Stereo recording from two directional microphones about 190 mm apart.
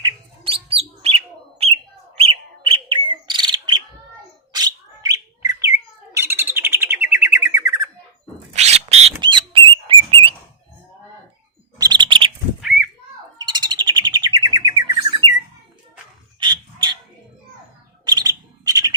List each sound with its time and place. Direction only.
0.0 s bird: 30° right (ahead or behind)
8.5 s bird: 35° right (ahead or behind)
11.8 s chirp: 20° right (ahead or behind)
13.4 s bird: 20° right (ahead or behind)
16.4 s a sound: 25° right (ahead or behind)
18.0 s bird: 20° right (ahead or behind)